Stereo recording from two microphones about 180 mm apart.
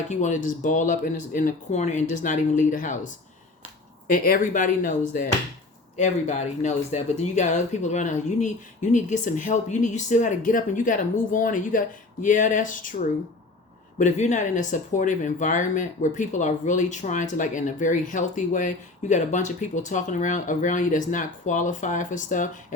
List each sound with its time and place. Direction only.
0.1 s speech: 45° left (ahead or behind)